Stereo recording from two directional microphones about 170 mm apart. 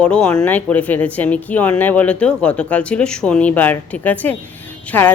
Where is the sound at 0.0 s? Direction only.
5° left (ahead or behind).